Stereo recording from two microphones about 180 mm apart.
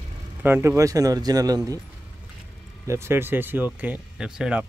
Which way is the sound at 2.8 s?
15° right (ahead or behind).